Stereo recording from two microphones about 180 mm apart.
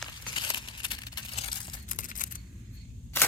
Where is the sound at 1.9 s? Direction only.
50° left (ahead or behind).